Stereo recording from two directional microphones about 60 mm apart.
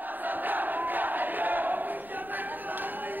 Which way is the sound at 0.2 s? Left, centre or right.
Right.